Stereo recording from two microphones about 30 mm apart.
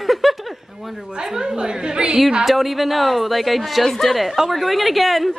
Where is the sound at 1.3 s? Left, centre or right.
Right.